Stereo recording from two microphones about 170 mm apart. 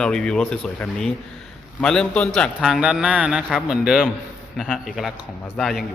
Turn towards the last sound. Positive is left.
turn(degrees=0)  # may be behind; listen again after turning